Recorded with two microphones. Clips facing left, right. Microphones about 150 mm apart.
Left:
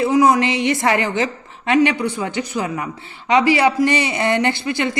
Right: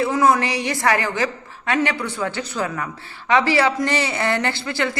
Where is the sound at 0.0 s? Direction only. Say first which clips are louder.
Left 3 dB; 15° left (ahead or behind).